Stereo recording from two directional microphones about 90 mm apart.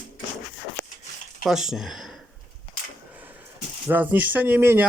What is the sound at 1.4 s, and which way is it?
Speech, 5° right (ahead or behind).